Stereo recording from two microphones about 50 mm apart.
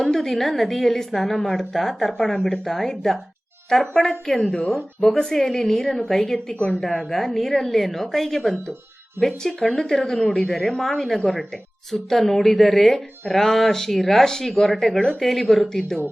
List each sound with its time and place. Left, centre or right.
0.0 s a woman's voice: centre
6.5 s a woman's voice: centre
6.7 s a woman's voice: centre